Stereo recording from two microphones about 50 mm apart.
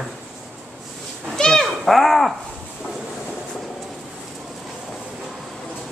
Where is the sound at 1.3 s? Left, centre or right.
Centre.